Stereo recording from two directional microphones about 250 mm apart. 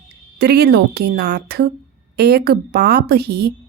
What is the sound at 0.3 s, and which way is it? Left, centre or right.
A woman's voice, right.